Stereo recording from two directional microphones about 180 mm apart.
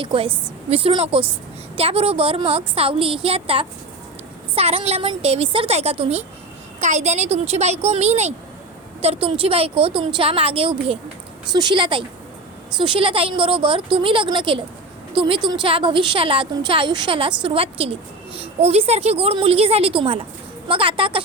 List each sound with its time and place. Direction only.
0.0 s a woman's voice: 30° right (ahead or behind)